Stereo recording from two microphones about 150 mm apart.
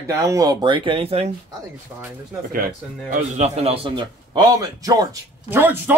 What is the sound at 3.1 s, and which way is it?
Speech, 50° right (ahead or behind).